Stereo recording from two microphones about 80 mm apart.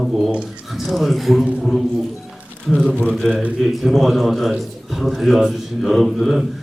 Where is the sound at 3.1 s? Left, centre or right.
Centre.